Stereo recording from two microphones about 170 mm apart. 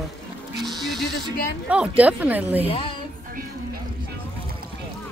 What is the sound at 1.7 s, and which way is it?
Speech, 5° right (ahead or behind).